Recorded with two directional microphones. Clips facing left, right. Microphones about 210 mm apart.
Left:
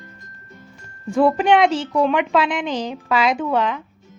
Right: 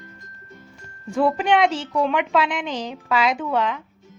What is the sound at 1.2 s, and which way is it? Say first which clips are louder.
Speech: left 4 dB; 45° left (ahead or behind).